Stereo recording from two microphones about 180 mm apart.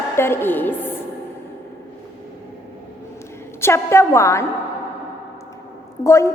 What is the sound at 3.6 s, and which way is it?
Speech, 15° left (ahead or behind).